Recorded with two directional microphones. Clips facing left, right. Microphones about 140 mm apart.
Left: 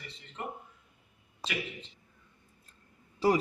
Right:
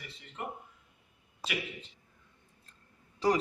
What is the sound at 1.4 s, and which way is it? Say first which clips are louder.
Speech: even; 10° right (ahead or behind).